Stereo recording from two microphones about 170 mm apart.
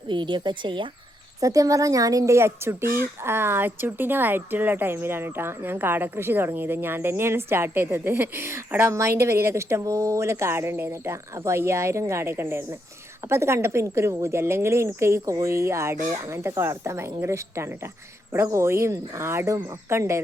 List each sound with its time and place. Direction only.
0.1 s a woman's voice: 25° right (ahead or behind)